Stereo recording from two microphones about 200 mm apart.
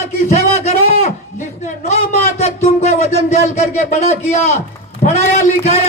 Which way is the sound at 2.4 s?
35° left (ahead or behind).